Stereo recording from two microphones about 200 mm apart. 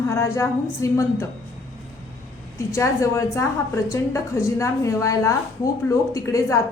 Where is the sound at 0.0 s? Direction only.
15° left (ahead or behind).